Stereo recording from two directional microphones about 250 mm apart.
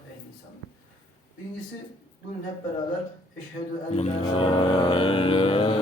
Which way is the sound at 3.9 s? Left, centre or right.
Left.